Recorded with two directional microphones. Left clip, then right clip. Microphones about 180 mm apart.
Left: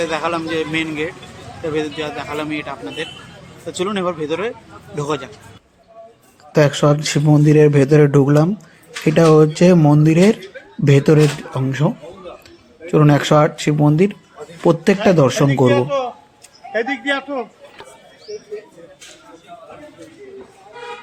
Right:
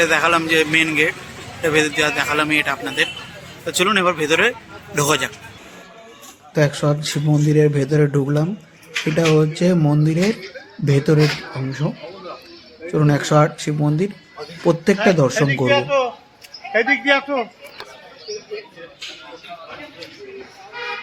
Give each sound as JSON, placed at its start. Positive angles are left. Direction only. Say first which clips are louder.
{"t": 0.0, "sound": "a man's voice", "louder": "right 5 dB", "side_deg": -5}
{"t": 6.5, "sound": "a man's voice", "louder": "left 5 dB", "side_deg": 15}
{"t": 15.7, "sound": "a man's voice", "louder": "right 1 dB", "side_deg": -25}